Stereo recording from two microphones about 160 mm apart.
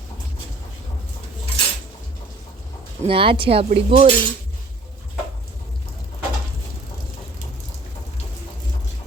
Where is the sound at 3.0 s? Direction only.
35° right (ahead or behind).